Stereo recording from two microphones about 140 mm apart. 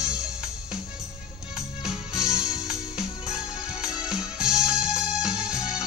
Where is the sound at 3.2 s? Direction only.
5° right (ahead or behind).